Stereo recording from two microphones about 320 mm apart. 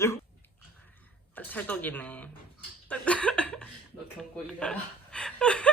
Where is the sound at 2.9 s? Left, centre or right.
Centre.